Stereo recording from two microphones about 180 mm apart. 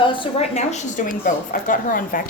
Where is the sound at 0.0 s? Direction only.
30° left (ahead or behind).